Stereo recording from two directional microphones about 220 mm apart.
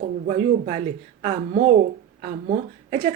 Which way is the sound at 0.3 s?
35° right (ahead or behind).